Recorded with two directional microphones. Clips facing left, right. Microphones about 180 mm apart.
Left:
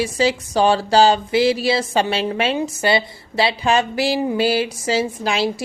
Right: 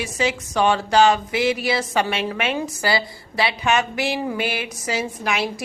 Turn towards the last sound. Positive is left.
turn(degrees=30)  # may be behind; listen again after turning